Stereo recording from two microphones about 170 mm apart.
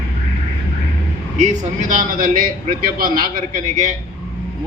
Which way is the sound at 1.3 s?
45° right (ahead or behind).